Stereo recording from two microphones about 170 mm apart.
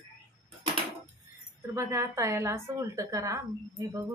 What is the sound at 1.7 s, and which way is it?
A woman's voice, 15° right (ahead or behind).